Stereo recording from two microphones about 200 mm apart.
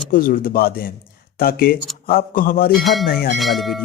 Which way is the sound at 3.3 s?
Centre (ahead or behind).